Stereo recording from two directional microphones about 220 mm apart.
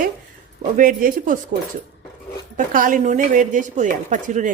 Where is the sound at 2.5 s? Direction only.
40° right (ahead or behind).